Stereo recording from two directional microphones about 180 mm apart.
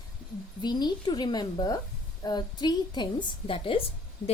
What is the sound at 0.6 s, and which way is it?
A woman's voice, 25° left (ahead or behind).